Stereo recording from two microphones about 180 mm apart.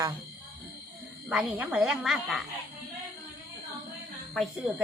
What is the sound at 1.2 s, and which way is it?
Speech, 5° right (ahead or behind).